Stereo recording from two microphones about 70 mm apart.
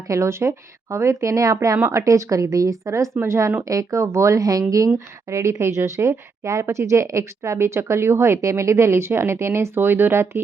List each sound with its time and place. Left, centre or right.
0.1 s speech: right
3.6 s speech: right
4.9 s speech: right